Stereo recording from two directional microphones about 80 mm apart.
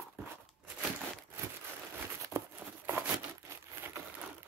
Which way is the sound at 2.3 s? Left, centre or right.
Right.